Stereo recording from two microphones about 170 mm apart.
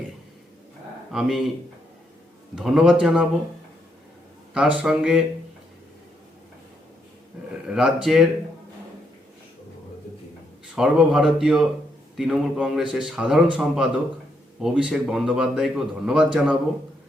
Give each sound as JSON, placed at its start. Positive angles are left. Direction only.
{"t": 1.1, "sound": "a man's voice", "side_deg": -5}
{"t": 2.6, "sound": "a man's voice", "side_deg": -5}
{"t": 4.5, "sound": "a man's voice", "side_deg": -5}
{"t": 7.3, "sound": "a sound", "side_deg": -5}
{"t": 7.7, "sound": "a man's voice", "side_deg": -5}
{"t": 10.8, "sound": "a man's voice", "side_deg": -5}